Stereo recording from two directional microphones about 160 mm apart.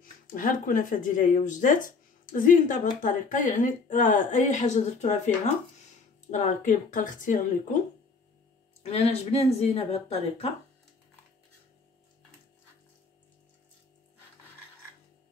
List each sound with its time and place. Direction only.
0.0 s speech: 55° left (ahead or behind)
8.8 s speech: 40° left (ahead or behind)